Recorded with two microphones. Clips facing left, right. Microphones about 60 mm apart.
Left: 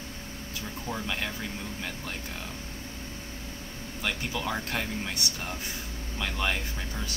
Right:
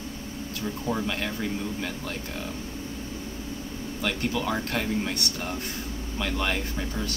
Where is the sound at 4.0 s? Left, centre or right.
Centre.